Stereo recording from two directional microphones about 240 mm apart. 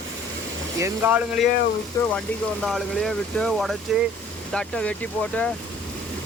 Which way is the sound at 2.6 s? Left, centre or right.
Centre.